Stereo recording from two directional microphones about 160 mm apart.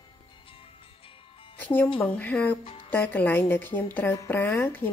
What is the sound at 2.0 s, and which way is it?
Speech, 10° left (ahead or behind).